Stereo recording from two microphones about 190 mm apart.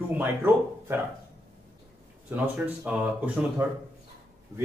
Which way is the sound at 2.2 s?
10° right (ahead or behind).